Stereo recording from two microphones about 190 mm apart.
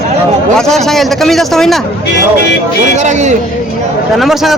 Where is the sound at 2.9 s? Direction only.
40° right (ahead or behind).